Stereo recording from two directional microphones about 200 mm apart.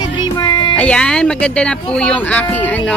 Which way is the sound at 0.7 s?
5° left (ahead or behind).